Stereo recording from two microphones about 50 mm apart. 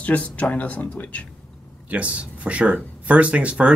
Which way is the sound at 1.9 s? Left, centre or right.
Right.